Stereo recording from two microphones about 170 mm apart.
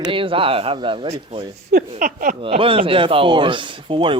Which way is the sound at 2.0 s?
50° right (ahead or behind).